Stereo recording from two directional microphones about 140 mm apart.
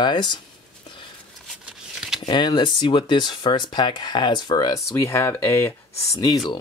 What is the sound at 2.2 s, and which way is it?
Speech, 35° left (ahead or behind).